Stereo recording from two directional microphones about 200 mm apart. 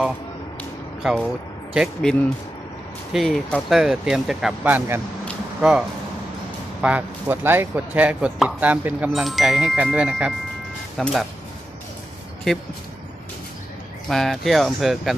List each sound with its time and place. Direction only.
1.0 s speech: centre (ahead or behind)
5.2 s a sound: 5° right (ahead or behind)
6.8 s speech: 10° right (ahead or behind)
12.5 s speech: 5° left (ahead or behind)
14.1 s speech: centre (ahead or behind)